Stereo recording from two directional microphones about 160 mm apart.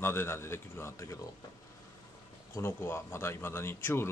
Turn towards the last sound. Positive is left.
turn(degrees=15)  # may be behind; listen again after turning